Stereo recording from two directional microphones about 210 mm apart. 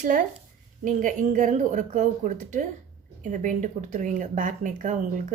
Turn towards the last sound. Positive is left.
turn(degrees=-35)  # may be behind; listen again after turning